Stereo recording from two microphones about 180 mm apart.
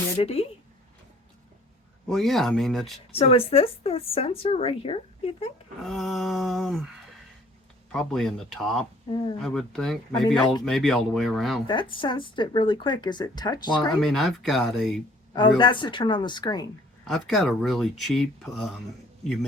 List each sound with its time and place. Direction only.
0.2 s speech: 35° left (ahead or behind)
2.0 s speech: centre (ahead or behind)
3.1 s speech: 35° left (ahead or behind)
5.8 s speech: centre (ahead or behind)
7.9 s speech: 5° left (ahead or behind)
11.7 s speech: 25° left (ahead or behind)
14.0 s speech: centre (ahead or behind)
15.4 s speech: 25° left (ahead or behind)
17.1 s speech: centre (ahead or behind)